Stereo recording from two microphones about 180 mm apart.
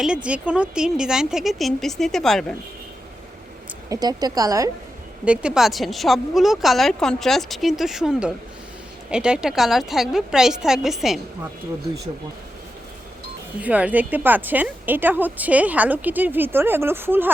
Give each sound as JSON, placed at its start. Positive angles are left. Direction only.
{"t": 0.0, "sound": "speech", "side_deg": -5}
{"t": 3.8, "sound": "a woman's voice", "side_deg": -20}
{"t": 5.2, "sound": "speech", "side_deg": -5}
{"t": 13.6, "sound": "speech", "side_deg": -10}